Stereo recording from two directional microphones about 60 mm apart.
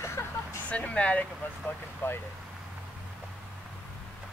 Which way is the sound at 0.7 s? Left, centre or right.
Left.